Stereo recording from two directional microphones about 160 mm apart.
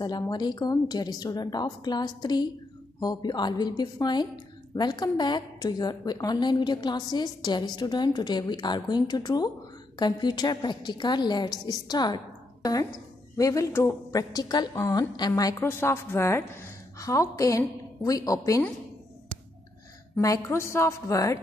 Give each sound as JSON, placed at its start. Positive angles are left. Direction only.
{"t": 0.3, "sound": "a woman's voice", "side_deg": 25}
{"t": 13.4, "sound": "a woman's voice", "side_deg": 20}
{"t": 20.2, "sound": "a woman's voice", "side_deg": 20}